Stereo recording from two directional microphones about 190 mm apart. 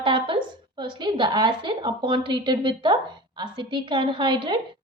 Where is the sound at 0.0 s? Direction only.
25° right (ahead or behind).